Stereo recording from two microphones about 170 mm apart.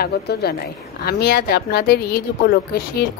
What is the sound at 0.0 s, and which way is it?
A woman's voice, 70° left (ahead or behind).